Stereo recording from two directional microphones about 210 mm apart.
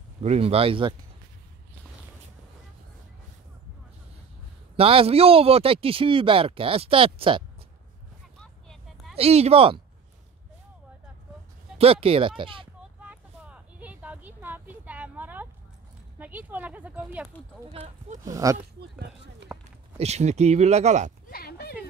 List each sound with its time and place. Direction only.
0.2 s a man's voice: 30° right (ahead or behind)
4.7 s a man's voice: 25° right (ahead or behind)
8.4 s vehicle: centre (ahead or behind)
9.1 s a man's voice: 30° right (ahead or behind)
11.8 s a man's voice: 25° right (ahead or behind)
13.0 s a sound: 5° right (ahead or behind)
16.2 s speech: 10° right (ahead or behind)
17.7 s speech: 35° right (ahead or behind)
18.2 s speech: 15° right (ahead or behind)
19.5 s a sound: 10° right (ahead or behind)
20.0 s speech: 30° right (ahead or behind)
21.3 s a sound: 45° left (ahead or behind)